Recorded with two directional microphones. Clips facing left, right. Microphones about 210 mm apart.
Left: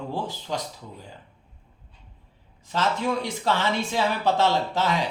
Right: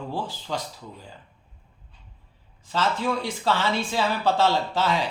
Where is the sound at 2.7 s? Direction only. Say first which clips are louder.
Even; 20° left (ahead or behind).